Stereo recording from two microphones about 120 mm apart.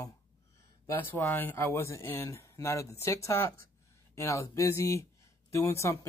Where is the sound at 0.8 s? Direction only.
20° left (ahead or behind).